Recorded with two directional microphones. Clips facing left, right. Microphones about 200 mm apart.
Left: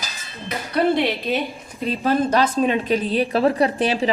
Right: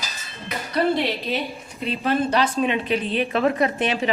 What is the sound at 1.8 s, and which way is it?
A woman's voice, 40° left (ahead or behind).